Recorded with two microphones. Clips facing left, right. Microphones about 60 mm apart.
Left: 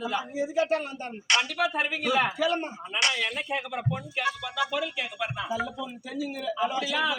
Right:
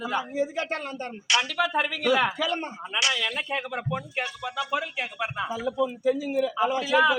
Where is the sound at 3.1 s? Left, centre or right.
Right.